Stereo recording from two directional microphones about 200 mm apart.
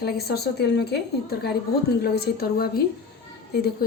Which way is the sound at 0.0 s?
50° left (ahead or behind).